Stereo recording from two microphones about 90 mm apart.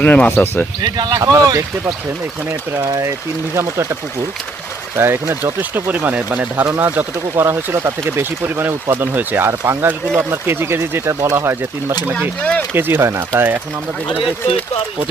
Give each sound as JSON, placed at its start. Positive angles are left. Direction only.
{"t": 0.0, "sound": "speech", "side_deg": 20}
{"t": 0.9, "sound": "speech", "side_deg": -45}
{"t": 4.9, "sound": "speech", "side_deg": -30}
{"t": 12.4, "sound": "speech", "side_deg": 15}
{"t": 12.7, "sound": "speech", "side_deg": -30}